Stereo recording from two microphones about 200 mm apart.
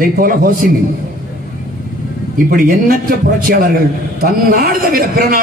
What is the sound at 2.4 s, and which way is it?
Speech, 45° right (ahead or behind).